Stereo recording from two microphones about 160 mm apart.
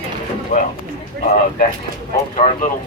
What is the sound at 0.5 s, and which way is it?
Speech, 50° left (ahead or behind).